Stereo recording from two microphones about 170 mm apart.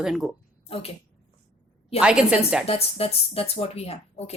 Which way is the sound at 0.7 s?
35° left (ahead or behind).